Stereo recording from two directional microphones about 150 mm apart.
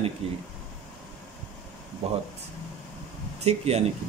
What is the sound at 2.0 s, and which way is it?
Speech, 45° right (ahead or behind).